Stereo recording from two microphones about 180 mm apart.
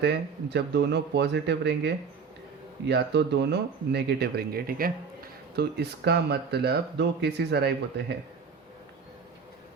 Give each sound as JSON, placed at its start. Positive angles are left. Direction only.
{"t": 0.0, "sound": "speech", "side_deg": -70}